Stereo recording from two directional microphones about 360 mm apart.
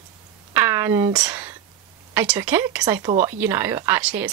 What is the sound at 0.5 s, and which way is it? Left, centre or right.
Speech, centre.